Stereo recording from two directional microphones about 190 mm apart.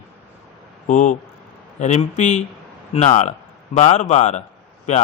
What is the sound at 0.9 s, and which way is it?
Speech, 40° left (ahead or behind).